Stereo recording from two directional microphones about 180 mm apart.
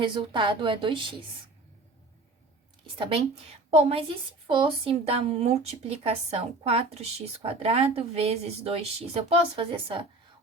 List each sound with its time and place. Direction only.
0.0 s a woman's voice: 25° right (ahead or behind)
3.0 s a woman's voice: 30° right (ahead or behind)